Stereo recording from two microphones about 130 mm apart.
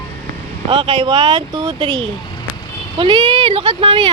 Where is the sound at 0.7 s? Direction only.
45° right (ahead or behind).